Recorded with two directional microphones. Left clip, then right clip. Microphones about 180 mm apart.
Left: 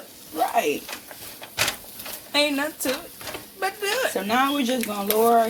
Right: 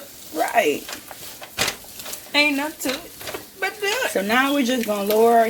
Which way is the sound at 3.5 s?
15° left (ahead or behind).